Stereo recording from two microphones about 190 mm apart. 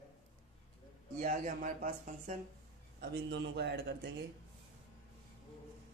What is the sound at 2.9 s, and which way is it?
A man's voice, 65° right (ahead or behind).